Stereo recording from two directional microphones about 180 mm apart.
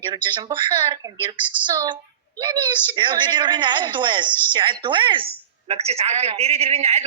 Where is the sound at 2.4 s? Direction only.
25° right (ahead or behind).